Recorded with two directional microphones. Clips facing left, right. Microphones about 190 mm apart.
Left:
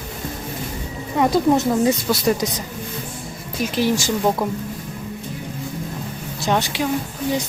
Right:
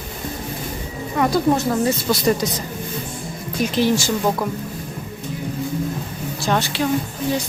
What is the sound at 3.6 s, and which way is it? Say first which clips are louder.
Speech: right 1 dB; 10° left (ahead or behind).